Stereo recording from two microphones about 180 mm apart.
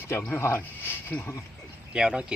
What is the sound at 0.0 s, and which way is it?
Speech, 15° left (ahead or behind).